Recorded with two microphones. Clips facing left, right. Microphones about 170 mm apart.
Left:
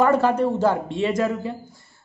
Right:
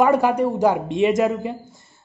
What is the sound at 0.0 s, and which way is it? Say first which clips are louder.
A man's voice: right 1 dB; 15° right (ahead or behind).